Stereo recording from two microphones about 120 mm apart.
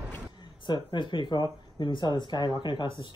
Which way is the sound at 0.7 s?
40° left (ahead or behind).